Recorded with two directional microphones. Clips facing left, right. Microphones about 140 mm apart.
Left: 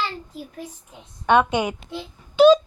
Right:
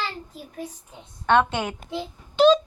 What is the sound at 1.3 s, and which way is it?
Speech, 15° left (ahead or behind).